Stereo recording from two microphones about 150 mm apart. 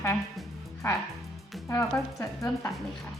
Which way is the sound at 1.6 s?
15° left (ahead or behind).